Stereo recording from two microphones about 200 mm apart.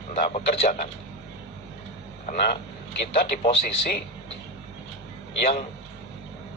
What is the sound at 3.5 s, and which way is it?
Speech, 40° left (ahead or behind).